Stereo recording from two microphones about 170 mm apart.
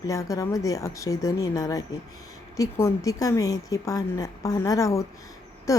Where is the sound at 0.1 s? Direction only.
20° left (ahead or behind).